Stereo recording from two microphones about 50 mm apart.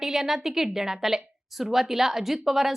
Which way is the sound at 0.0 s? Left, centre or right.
Centre.